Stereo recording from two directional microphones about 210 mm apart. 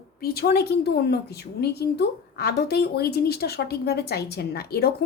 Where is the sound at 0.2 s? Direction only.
45° left (ahead or behind).